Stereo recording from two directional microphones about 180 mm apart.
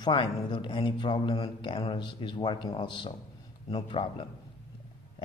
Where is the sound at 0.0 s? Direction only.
25° left (ahead or behind).